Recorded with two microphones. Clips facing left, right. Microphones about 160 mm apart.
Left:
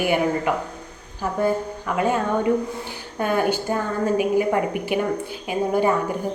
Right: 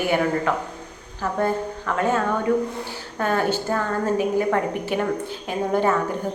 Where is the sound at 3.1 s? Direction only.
15° left (ahead or behind).